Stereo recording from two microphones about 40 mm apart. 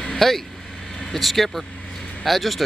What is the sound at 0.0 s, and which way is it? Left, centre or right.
Vehicle, centre.